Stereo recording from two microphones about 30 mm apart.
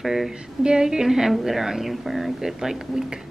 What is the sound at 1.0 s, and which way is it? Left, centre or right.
Speech, centre.